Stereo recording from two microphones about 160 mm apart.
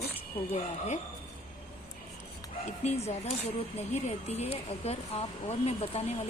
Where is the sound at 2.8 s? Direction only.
40° left (ahead or behind).